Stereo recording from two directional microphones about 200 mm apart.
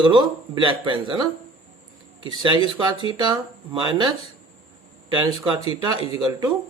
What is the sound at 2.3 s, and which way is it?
Speech, 25° right (ahead or behind).